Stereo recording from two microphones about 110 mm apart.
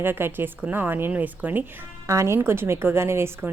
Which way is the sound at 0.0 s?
20° right (ahead or behind).